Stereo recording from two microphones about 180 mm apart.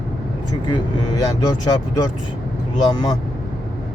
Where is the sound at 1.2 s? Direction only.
20° left (ahead or behind).